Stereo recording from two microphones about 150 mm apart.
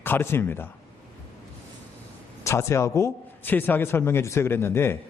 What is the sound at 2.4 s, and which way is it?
A man's voice, 20° left (ahead or behind).